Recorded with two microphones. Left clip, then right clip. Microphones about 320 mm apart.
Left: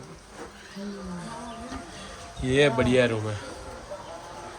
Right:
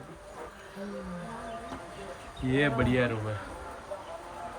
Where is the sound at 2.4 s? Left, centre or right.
Centre.